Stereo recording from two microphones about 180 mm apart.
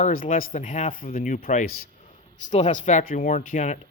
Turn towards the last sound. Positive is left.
turn(degrees=45)  # may be behind; listen again after turning